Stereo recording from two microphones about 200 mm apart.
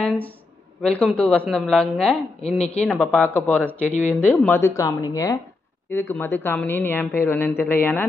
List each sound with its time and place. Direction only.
0.0 s a sound: 5° left (ahead or behind)
0.8 s a woman's voice: 5° left (ahead or behind)
2.4 s speech: 30° left (ahead or behind)
2.8 s a woman's voice: 5° left (ahead or behind)